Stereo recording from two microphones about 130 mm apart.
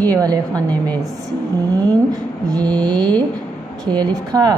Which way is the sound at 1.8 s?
30° right (ahead or behind).